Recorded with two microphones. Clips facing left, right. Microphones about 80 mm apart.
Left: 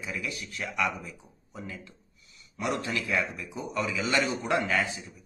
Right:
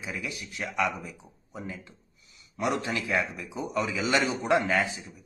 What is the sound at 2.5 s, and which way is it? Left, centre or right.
Speech, right.